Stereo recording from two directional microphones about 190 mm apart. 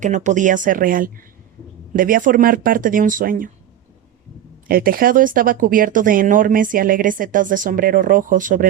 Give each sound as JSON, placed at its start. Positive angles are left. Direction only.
{"t": 0.0, "sound": "speech", "side_deg": -40}
{"t": 4.7, "sound": "speech", "side_deg": -50}